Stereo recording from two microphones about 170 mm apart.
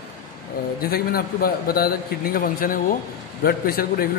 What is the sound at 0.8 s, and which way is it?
A man's voice, 60° left (ahead or behind).